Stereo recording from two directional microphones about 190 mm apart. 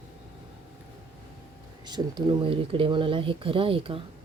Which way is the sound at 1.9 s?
20° right (ahead or behind).